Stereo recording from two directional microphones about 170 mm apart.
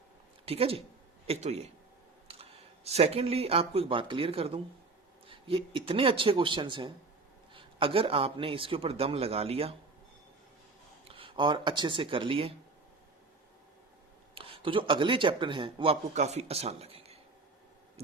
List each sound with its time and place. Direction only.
0.4 s a man's voice: 35° right (ahead or behind)
11.1 s speech: 30° right (ahead or behind)
14.3 s a man's voice: 30° right (ahead or behind)